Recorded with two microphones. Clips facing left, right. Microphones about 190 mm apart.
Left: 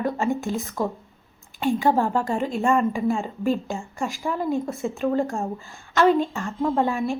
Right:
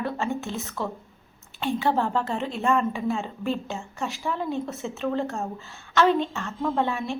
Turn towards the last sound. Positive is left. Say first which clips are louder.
# left 3 dB
turn(degrees=10)  # may be behind; listen again after turning